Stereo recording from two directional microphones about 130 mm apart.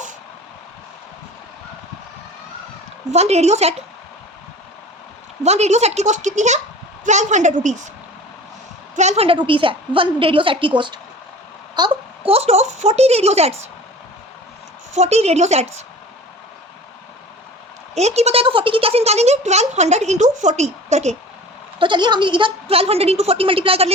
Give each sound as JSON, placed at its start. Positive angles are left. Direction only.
{"t": 3.1, "sound": "speech", "side_deg": -55}
{"t": 5.4, "sound": "a woman's voice", "side_deg": -60}
{"t": 9.0, "sound": "a woman's voice", "side_deg": -55}
{"t": 11.8, "sound": "a woman's voice", "side_deg": -45}
{"t": 14.9, "sound": "speech", "side_deg": -60}
{"t": 17.9, "sound": "speech", "side_deg": -55}
{"t": 21.8, "sound": "a woman's voice", "side_deg": -35}